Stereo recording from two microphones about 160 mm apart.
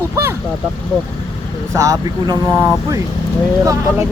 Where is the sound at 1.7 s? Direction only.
20° right (ahead or behind).